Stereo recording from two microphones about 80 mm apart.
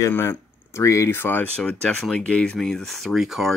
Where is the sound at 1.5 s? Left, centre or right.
Centre.